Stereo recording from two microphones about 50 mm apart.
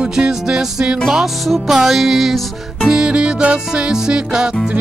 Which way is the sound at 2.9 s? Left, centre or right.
Centre.